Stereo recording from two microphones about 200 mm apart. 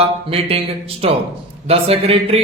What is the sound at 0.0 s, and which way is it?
A man's voice, 30° right (ahead or behind).